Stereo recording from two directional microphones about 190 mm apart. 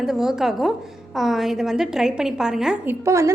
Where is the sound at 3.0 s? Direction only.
15° right (ahead or behind).